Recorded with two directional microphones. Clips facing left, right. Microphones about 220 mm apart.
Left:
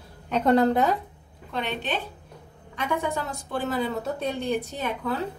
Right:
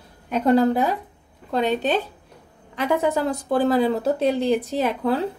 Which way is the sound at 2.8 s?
90° right.